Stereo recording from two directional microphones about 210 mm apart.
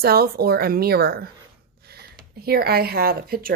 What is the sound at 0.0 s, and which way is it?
Speech, 45° right (ahead or behind).